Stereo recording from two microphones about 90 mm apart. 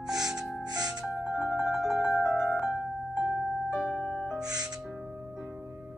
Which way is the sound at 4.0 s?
15° left (ahead or behind).